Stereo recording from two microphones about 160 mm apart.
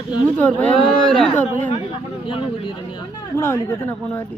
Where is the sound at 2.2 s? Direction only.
30° left (ahead or behind).